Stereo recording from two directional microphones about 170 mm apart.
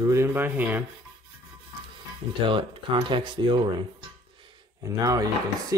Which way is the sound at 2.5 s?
30° right (ahead or behind).